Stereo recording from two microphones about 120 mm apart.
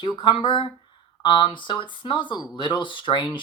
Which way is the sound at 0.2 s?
40° left (ahead or behind).